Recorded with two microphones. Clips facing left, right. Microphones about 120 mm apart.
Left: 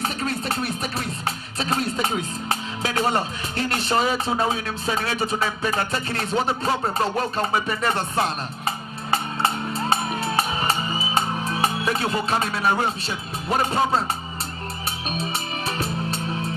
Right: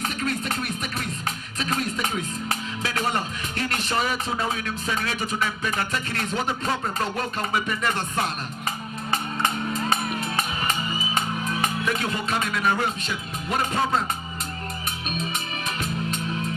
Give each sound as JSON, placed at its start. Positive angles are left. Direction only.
{"t": 0.0, "sound": "music", "side_deg": 35}
{"t": 2.8, "sound": "speech", "side_deg": 35}
{"t": 9.1, "sound": "music", "side_deg": 35}
{"t": 13.5, "sound": "speech", "side_deg": 35}
{"t": 15.0, "sound": "music", "side_deg": 35}